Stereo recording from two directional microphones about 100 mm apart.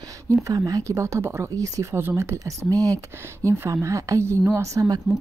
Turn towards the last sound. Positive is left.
turn(degrees=-35)  # may be behind; listen again after turning